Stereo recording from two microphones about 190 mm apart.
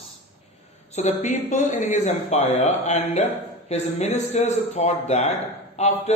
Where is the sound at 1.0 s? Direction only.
40° left (ahead or behind).